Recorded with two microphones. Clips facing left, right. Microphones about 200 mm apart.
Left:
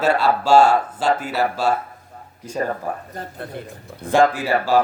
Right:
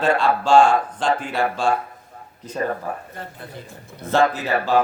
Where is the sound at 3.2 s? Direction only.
40° left (ahead or behind).